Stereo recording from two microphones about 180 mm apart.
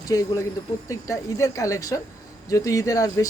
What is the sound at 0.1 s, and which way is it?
Speech, 20° left (ahead or behind).